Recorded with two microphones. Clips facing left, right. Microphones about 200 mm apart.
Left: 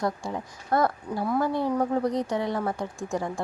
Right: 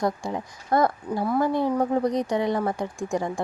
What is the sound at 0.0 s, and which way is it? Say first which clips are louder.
Speech: right 3 dB; 15° right (ahead or behind).